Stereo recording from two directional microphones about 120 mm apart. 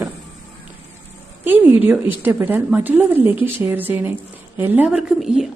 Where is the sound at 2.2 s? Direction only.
15° right (ahead or behind).